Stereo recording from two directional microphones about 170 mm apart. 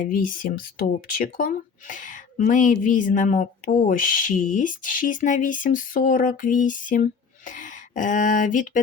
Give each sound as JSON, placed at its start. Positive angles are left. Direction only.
{"t": 0.0, "sound": "speech", "side_deg": 55}